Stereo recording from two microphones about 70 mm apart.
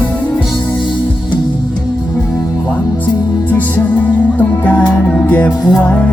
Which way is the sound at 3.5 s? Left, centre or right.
Left.